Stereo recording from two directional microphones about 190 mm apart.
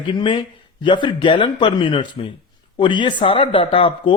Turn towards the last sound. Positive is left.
turn(degrees=25)  # may be behind; listen again after turning